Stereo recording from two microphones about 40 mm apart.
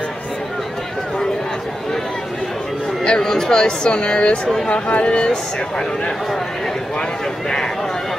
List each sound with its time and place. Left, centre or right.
3.0 s speech: centre